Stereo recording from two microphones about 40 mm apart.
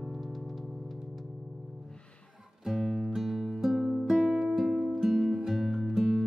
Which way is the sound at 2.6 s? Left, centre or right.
Centre.